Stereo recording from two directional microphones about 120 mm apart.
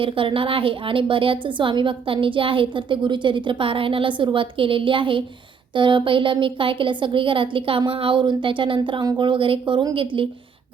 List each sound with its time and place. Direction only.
0.0 s a woman's voice: 45° right (ahead or behind)